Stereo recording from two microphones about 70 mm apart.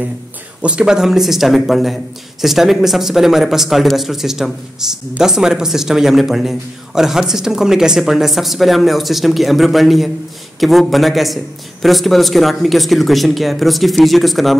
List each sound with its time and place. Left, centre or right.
0.6 s speech: centre